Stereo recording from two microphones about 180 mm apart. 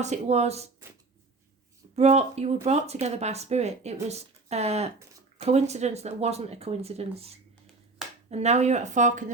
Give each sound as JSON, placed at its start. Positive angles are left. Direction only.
{"t": 0.0, "sound": "speech", "side_deg": -40}
{"t": 2.0, "sound": "speech", "side_deg": -35}